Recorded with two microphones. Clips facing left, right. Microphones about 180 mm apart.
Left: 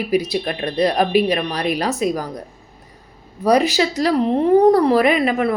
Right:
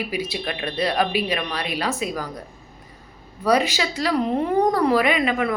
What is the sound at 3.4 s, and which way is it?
A woman's voice, 35° left (ahead or behind).